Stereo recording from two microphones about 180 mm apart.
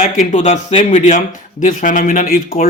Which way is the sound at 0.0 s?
45° left (ahead or behind).